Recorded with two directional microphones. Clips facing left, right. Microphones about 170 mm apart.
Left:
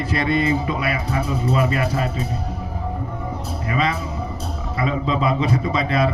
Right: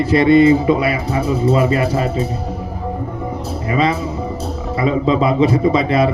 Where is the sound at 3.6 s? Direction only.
30° right (ahead or behind).